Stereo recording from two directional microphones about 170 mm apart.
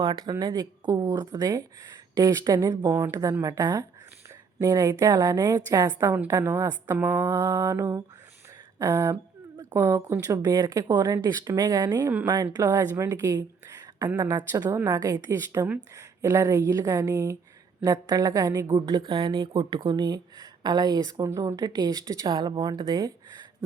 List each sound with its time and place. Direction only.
0.0 s a woman's voice: 25° right (ahead or behind)